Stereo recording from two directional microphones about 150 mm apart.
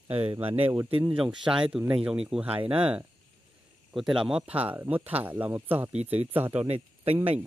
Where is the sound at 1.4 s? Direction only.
5° right (ahead or behind).